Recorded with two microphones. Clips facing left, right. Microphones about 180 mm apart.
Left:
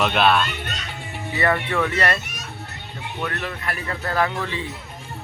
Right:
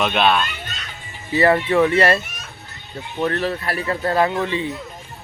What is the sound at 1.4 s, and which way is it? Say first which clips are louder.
Speech: right 6 dB; 30° right (ahead or behind).